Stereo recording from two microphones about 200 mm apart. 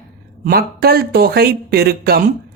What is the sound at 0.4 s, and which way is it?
Speech, 50° right (ahead or behind).